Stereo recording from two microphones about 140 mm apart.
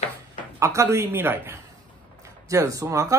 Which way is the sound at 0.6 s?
20° right (ahead or behind).